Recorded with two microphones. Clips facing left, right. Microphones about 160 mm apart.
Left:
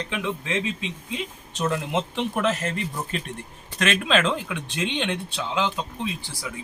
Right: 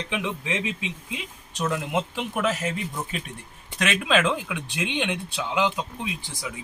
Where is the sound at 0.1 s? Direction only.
15° right (ahead or behind).